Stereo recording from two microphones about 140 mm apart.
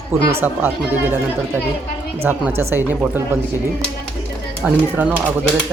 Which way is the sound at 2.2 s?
15° right (ahead or behind).